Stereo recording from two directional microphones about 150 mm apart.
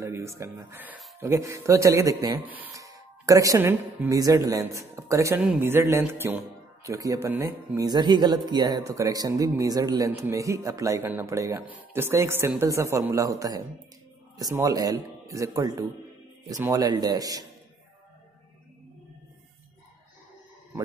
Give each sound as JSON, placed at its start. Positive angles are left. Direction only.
{"t": 0.0, "sound": "speech", "side_deg": -20}
{"t": 2.7, "sound": "speech", "side_deg": -20}